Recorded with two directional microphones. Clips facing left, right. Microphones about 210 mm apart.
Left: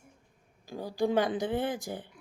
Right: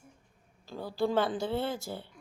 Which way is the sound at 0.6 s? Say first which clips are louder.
Left 1 dB; 15° left (ahead or behind).